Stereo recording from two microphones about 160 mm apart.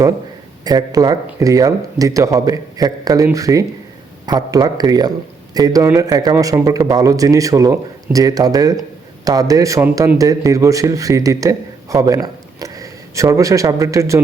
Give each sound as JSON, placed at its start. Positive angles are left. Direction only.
{"t": 0.6, "sound": "a man's voice", "side_deg": -25}